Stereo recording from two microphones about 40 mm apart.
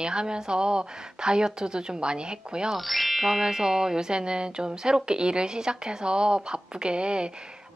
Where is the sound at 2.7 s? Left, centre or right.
Centre; by 7.3 s right.